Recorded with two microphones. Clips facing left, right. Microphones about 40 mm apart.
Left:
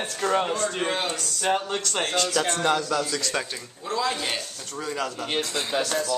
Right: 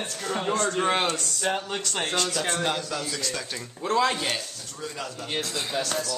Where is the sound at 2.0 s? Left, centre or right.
Centre.